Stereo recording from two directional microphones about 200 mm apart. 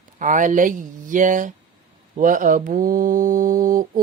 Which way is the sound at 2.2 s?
40° right (ahead or behind).